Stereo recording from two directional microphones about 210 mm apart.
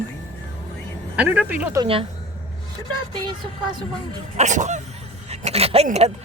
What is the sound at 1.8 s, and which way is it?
Speech, 25° right (ahead or behind).